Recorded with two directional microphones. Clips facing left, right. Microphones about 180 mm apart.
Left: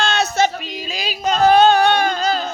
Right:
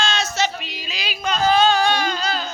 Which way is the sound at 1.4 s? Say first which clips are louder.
Left 5 dB; 60° left (ahead or behind).